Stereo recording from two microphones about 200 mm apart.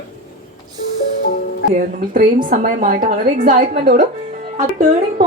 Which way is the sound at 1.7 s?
40° right (ahead or behind).